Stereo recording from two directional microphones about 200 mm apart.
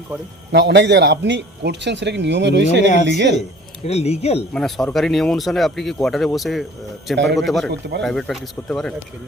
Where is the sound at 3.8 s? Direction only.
30° left (ahead or behind).